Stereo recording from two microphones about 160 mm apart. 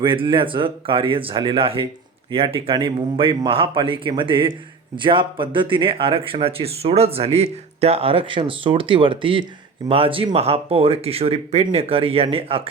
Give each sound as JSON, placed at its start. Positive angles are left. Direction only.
{"t": 0.0, "sound": "speech", "side_deg": -30}